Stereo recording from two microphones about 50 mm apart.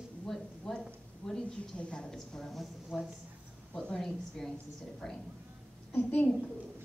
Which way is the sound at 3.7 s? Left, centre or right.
Centre.